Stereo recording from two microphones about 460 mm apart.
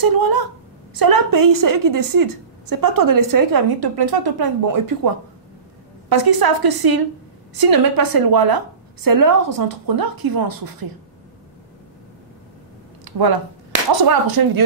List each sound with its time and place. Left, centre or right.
0.0 s a woman's voice: right
13.0 s a sound: right
13.9 s a woman's voice: right